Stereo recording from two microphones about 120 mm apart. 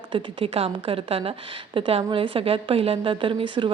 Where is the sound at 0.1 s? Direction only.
50° right (ahead or behind).